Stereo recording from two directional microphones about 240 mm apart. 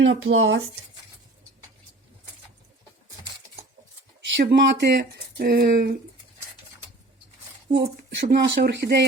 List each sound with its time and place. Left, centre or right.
0.0 s speech: right
4.4 s speech: right
8.1 s speech: right